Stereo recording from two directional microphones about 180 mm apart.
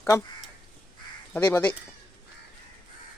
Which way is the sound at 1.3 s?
10° left (ahead or behind).